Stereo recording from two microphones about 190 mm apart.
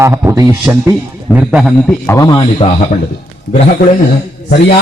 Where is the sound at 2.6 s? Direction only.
25° left (ahead or behind).